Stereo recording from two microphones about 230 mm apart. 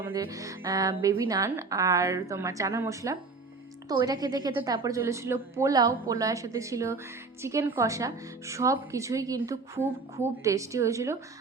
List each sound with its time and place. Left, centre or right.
0.0 s a woman's voice: centre